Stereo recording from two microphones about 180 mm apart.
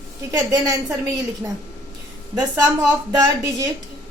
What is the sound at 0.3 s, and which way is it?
Speech, 15° right (ahead or behind).